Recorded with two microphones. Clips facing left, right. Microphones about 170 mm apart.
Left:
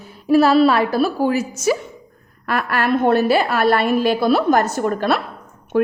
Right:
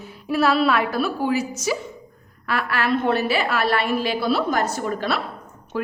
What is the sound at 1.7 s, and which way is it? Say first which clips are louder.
A woman's voice: left 6 dB; 55° left (ahead or behind).